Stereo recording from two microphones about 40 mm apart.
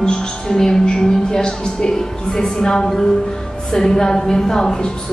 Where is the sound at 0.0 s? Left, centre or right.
Centre.